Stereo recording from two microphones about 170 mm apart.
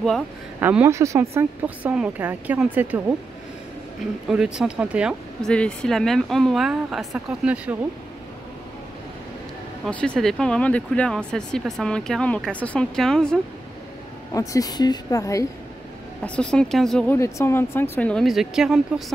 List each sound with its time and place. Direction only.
0.6 s speech: 10° right (ahead or behind)
4.3 s speech: 5° right (ahead or behind)
5.4 s speech: 5° left (ahead or behind)
9.8 s speech: 5° left (ahead or behind)
14.3 s a woman's voice: 20° left (ahead or behind)
16.3 s speech: 5° left (ahead or behind)
17.2 s speech: 15° left (ahead or behind); by 19.0 s centre (ahead or behind)